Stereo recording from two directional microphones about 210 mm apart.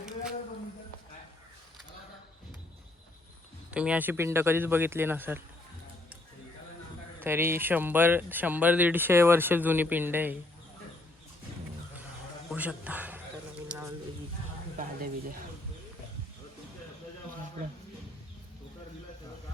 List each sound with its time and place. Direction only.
3.7 s speech: 5° right (ahead or behind)
7.2 s speech: 10° right (ahead or behind)
12.5 s a sound: 5° right (ahead or behind)
14.8 s speech: 40° right (ahead or behind)